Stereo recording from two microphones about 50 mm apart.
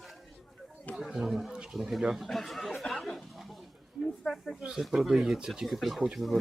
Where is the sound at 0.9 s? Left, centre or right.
Centre.